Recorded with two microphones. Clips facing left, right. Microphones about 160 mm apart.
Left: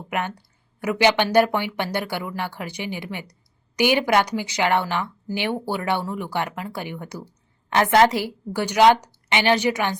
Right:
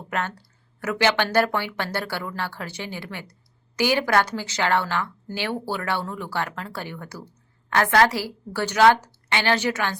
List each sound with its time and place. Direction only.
0.1 s a woman's voice: 15° left (ahead or behind)